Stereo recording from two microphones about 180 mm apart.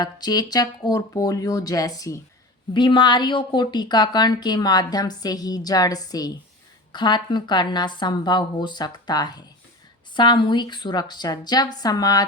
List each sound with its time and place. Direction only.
0.0 s a woman's voice: 20° left (ahead or behind)